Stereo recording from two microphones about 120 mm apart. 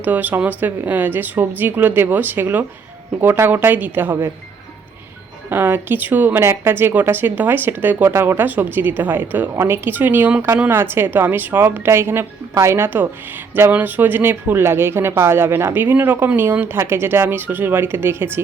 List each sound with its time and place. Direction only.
0.0 s speech: 15° right (ahead or behind)
5.5 s speech: 15° right (ahead or behind)